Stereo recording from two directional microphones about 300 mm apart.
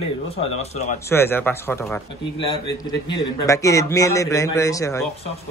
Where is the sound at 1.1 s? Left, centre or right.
Centre.